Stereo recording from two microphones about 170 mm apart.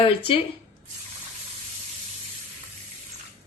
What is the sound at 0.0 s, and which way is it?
Speech, 30° left (ahead or behind).